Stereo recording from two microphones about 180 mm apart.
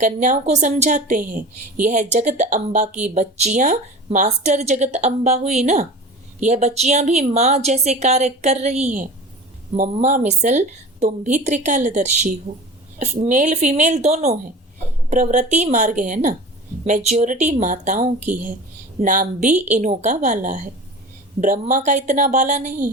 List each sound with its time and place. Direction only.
0.0 s a woman's voice: 45° right (ahead or behind)